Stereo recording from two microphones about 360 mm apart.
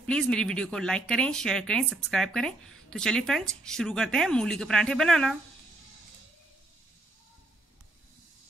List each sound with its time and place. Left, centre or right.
0.0 s speech: centre